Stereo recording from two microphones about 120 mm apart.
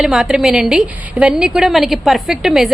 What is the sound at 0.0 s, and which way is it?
A woman's voice, 5° right (ahead or behind).